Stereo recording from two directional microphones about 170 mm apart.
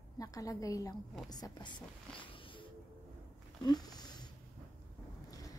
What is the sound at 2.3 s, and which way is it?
Music, 30° left (ahead or behind).